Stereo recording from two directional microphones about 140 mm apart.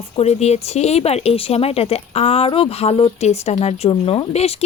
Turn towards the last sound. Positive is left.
turn(degrees=45)  # may be behind; listen again after turning